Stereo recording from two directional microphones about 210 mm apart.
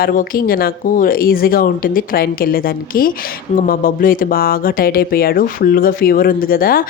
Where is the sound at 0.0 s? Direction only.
45° left (ahead or behind).